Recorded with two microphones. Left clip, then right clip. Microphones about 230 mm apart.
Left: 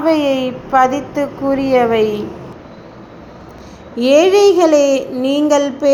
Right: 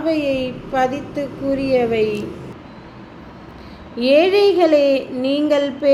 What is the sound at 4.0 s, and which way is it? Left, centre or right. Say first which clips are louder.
A woman's voice: left 4 dB; centre.